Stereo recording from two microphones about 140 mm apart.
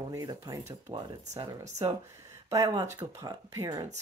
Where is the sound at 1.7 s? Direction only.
20° right (ahead or behind).